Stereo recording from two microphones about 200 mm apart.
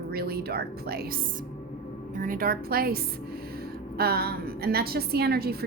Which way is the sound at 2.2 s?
45° right (ahead or behind).